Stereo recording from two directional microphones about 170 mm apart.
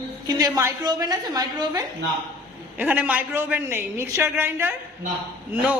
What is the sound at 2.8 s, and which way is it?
A man's voice, 10° right (ahead or behind).